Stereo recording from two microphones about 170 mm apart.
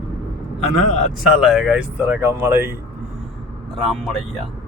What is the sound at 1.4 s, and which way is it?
Speech, centre (ahead or behind).